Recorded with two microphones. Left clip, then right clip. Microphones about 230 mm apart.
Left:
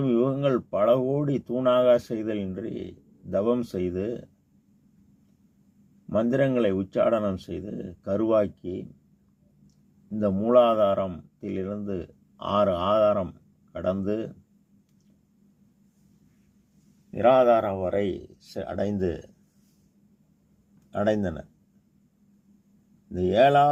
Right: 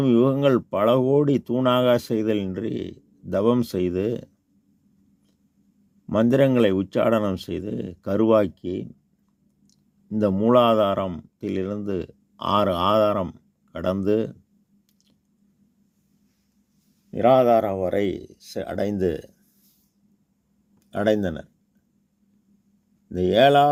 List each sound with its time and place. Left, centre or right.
0.0 s speech: right
6.1 s a man's voice: right
17.1 s speech: right
20.9 s speech: right
23.1 s speech: right